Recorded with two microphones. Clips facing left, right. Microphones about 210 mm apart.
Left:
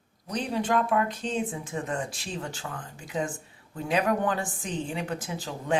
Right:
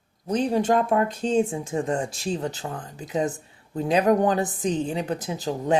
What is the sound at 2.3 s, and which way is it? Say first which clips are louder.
Speech: right 8 dB; 40° right (ahead or behind).